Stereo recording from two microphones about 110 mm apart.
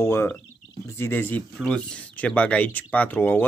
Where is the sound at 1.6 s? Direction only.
10° left (ahead or behind).